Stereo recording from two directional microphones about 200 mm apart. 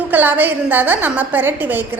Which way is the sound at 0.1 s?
10° right (ahead or behind).